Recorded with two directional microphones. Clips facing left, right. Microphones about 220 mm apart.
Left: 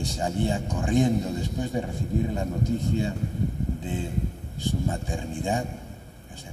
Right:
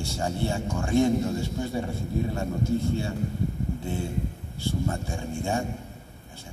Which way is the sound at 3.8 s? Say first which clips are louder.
Even; 15° left (ahead or behind).